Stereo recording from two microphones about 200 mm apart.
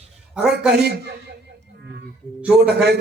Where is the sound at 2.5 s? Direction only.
55° right (ahead or behind).